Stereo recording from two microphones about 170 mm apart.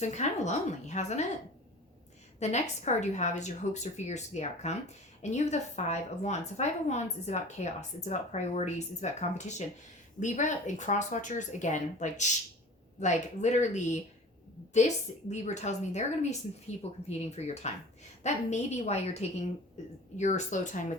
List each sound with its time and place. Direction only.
0.0 s a woman's voice: 45° left (ahead or behind)
2.4 s a woman's voice: 40° left (ahead or behind)